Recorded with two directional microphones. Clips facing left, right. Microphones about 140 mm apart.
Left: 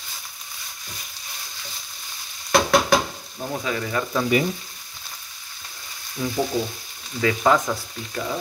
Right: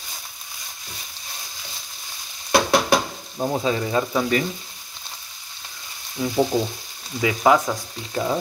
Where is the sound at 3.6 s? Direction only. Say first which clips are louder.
Right 2 dB; 25° right (ahead or behind).